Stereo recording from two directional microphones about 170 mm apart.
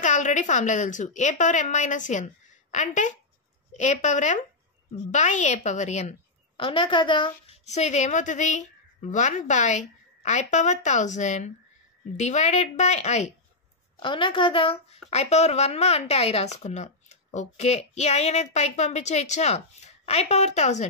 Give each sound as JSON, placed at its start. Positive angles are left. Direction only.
{"t": 0.0, "sound": "a woman's voice", "side_deg": 45}
{"t": 7.6, "sound": "a woman's voice", "side_deg": 40}
{"t": 13.9, "sound": "a woman's voice", "side_deg": 30}